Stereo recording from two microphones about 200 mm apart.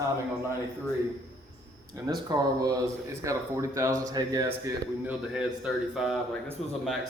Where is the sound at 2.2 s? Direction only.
20° right (ahead or behind); by 6.2 s centre (ahead or behind).